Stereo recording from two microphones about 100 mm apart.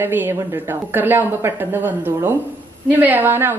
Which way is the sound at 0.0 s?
20° right (ahead or behind).